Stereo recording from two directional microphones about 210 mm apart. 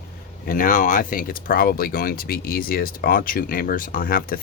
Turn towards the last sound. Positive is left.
turn(degrees=45)  # may be behind; listen again after turning